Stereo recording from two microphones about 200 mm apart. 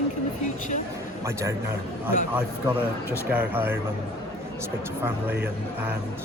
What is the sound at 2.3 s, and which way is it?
Speech, 10° right (ahead or behind).